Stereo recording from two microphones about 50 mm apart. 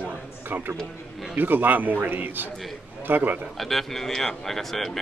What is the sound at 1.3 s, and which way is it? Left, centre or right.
Speech, right.